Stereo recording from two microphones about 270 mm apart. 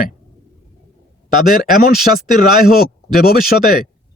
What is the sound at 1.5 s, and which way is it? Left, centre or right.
Speech, left.